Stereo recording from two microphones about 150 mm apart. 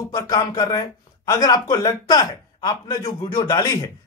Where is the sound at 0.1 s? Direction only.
25° left (ahead or behind).